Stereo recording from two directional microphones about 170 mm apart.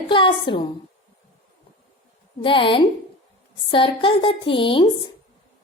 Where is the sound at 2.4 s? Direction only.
30° left (ahead or behind).